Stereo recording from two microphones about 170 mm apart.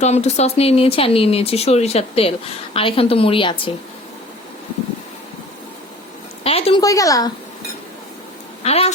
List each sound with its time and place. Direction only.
0.0 s speech: 40° left (ahead or behind)
6.4 s a woman's voice: 35° left (ahead or behind)
6.8 s a woman's voice: 20° left (ahead or behind)
8.6 s speech: 35° left (ahead or behind)